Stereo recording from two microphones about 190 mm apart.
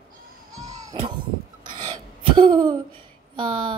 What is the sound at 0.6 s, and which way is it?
Children playing, 20° right (ahead or behind).